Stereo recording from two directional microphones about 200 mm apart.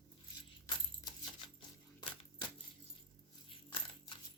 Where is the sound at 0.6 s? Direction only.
25° left (ahead or behind).